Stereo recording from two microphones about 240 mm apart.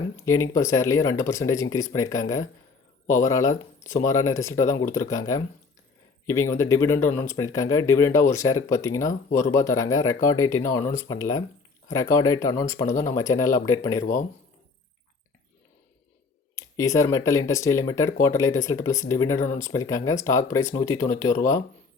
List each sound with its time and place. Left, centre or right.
0.3 s speech: centre
14.0 s speech: left
16.6 s speech: centre